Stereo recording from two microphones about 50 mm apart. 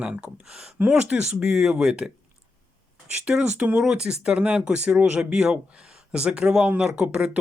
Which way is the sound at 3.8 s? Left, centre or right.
Centre.